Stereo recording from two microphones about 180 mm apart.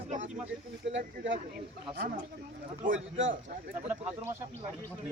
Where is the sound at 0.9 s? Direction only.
90° right.